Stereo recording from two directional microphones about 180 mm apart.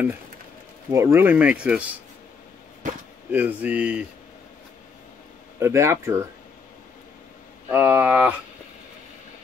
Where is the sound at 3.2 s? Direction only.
10° right (ahead or behind).